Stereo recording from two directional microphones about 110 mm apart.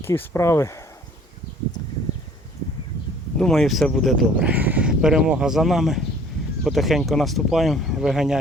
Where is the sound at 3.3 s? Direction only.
5° left (ahead or behind).